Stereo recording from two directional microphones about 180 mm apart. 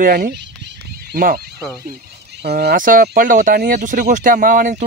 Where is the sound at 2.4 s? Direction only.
60° right (ahead or behind).